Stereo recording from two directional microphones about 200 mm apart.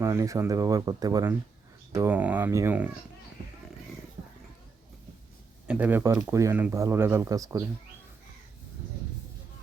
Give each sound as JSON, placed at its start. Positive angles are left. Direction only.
{"t": 0.0, "sound": "speech", "side_deg": -15}
{"t": 5.6, "sound": "speech", "side_deg": -10}